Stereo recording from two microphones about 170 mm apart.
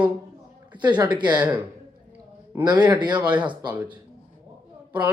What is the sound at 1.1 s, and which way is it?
Speech, 25° right (ahead or behind).